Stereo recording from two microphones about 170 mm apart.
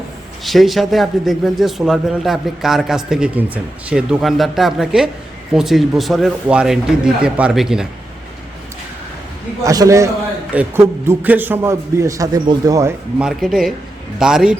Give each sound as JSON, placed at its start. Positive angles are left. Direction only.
{"t": 0.4, "sound": "a man's voice", "side_deg": 0}
{"t": 9.6, "sound": "a man's voice", "side_deg": -20}
{"t": 13.1, "sound": "a man's voice", "side_deg": -5}